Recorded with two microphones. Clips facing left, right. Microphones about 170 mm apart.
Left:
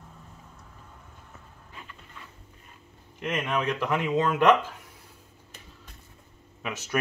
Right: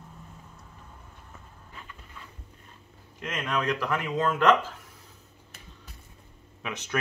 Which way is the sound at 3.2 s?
20° left (ahead or behind).